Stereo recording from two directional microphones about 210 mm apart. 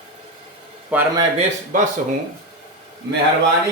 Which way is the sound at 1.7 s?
40° right (ahead or behind).